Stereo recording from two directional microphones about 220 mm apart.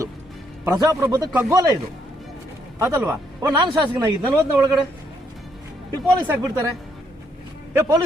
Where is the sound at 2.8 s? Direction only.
15° right (ahead or behind).